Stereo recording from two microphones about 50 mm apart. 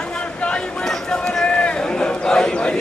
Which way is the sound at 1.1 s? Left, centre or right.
Centre.